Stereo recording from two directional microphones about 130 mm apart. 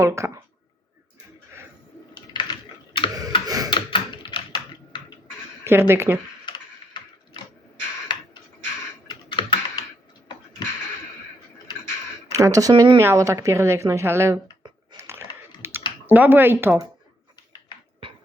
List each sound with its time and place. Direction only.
0.0 s a woman's voice: 25° right (ahead or behind)
2.3 s typing: 35° left (ahead or behind)
3.4 s typewriter: 30° right (ahead or behind)
3.7 s typing: 40° left (ahead or behind)
5.6 s a woman's voice: 20° right (ahead or behind)
7.0 s a sound: 35° left (ahead or behind)
9.0 s computer keyboard: 35° left (ahead or behind)
12.3 s a woman's voice: 25° right (ahead or behind)
14.9 s typing: 20° right (ahead or behind)
16.0 s speech: 15° right (ahead or behind)